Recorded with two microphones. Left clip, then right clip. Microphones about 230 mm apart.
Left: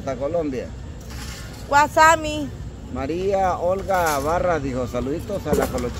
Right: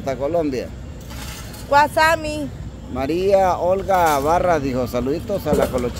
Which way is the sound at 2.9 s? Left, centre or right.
Right.